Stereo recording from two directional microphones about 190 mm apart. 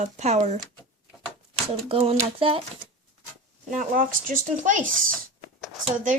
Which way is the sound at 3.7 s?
45° right (ahead or behind).